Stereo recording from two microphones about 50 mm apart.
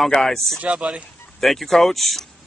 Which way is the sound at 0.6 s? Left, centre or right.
Right.